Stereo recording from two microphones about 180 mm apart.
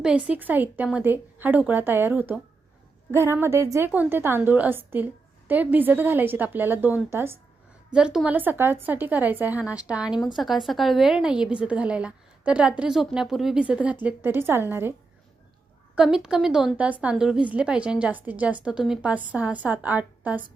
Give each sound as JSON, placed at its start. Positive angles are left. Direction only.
{"t": 0.0, "sound": "a woman's voice", "side_deg": -5}
{"t": 16.0, "sound": "a woman's voice", "side_deg": -5}